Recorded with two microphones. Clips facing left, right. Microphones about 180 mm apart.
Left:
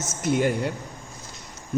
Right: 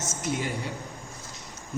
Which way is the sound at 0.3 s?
60° left (ahead or behind).